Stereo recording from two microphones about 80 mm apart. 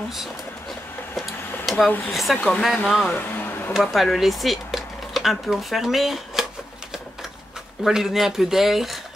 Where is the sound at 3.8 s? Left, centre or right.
Centre.